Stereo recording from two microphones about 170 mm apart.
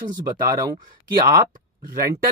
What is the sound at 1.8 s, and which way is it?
Speech, 60° right (ahead or behind).